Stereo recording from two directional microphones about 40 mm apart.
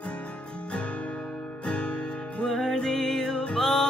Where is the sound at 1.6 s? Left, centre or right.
Left.